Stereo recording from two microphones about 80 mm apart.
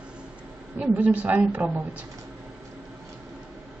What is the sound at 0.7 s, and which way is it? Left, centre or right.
A woman's voice, centre.